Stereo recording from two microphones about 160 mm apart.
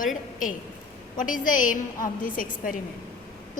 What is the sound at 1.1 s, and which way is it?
A woman's voice, 55° left (ahead or behind).